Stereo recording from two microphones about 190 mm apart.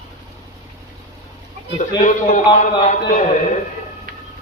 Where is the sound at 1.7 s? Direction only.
40° left (ahead or behind).